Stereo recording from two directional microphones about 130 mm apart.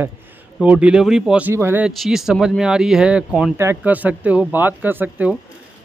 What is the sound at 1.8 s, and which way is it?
Speech, 5° right (ahead or behind).